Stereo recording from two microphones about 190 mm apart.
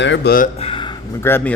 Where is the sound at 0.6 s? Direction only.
30° left (ahead or behind).